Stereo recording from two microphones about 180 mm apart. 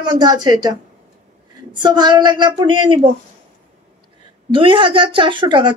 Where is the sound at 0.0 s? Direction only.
25° right (ahead or behind).